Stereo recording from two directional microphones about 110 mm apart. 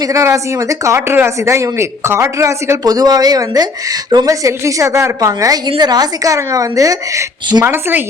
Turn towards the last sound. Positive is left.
turn(degrees=-20)  # may be behind; listen again after turning